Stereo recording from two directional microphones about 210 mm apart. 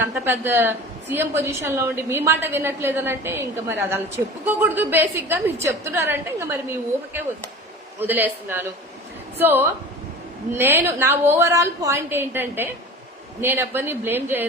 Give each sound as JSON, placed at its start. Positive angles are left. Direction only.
{"t": 0.0, "sound": "a woman's voice", "side_deg": -10}